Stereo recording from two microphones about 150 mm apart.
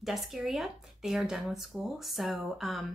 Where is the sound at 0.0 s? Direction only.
Centre (ahead or behind).